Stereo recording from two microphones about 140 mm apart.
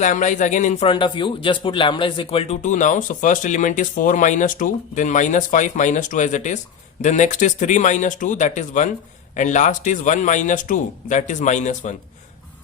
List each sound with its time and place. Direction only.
0.0 s speech: 60° left (ahead or behind)
0.9 s a man's voice: 35° left (ahead or behind)
2.6 s speech: 60° left (ahead or behind)